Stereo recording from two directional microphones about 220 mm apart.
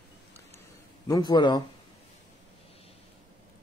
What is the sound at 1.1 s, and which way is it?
Speech, 20° left (ahead or behind).